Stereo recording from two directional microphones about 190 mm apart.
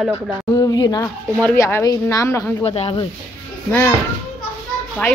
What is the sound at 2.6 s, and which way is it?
Speech, 30° left (ahead or behind).